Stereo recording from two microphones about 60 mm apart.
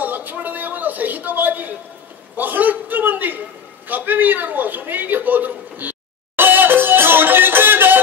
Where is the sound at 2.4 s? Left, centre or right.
Right.